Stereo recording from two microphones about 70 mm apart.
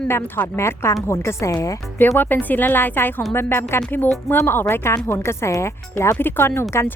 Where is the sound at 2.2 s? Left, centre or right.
Left.